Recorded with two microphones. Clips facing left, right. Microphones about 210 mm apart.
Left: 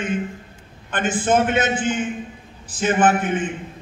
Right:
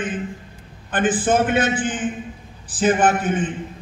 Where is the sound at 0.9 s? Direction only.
35° right (ahead or behind).